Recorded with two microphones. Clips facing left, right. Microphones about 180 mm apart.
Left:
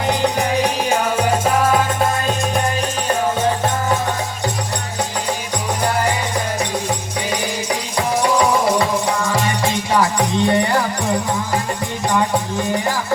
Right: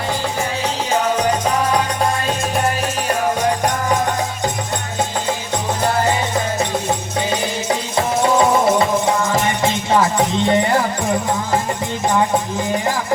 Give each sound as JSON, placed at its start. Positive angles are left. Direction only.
{"t": 0.2, "sound": "music", "side_deg": 15}
{"t": 7.7, "sound": "music", "side_deg": -25}